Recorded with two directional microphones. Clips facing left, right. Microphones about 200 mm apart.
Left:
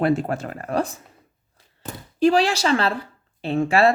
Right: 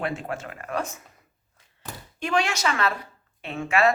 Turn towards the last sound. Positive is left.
turn(degrees=35)  # may be behind; listen again after turning